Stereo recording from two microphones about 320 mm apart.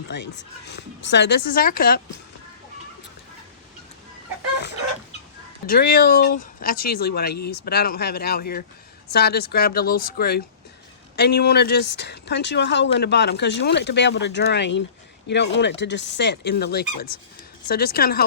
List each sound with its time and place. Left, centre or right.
0.1 s speech: left
5.6 s speech: left